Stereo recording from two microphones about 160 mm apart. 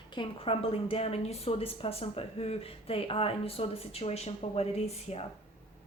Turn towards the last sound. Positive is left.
turn(degrees=40)  # may be behind; listen again after turning